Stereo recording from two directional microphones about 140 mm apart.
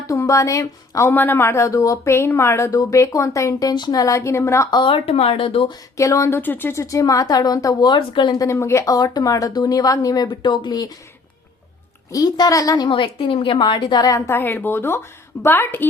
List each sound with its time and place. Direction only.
0.1 s speech: 25° left (ahead or behind)
4.8 s speech: 40° left (ahead or behind)
6.0 s speech: 20° left (ahead or behind)
8.4 s speech: 20° left (ahead or behind)
12.1 s a woman's voice: 25° left (ahead or behind)